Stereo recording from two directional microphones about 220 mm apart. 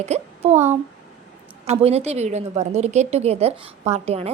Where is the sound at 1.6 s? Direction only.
30° right (ahead or behind).